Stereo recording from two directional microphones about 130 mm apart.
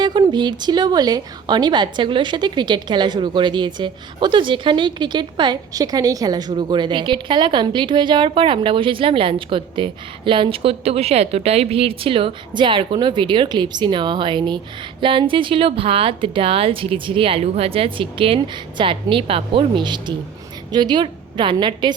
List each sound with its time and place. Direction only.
0.0 s a woman's voice: 35° right (ahead or behind)